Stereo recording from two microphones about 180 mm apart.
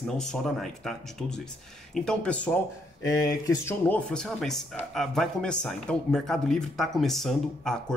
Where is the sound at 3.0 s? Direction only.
20° left (ahead or behind).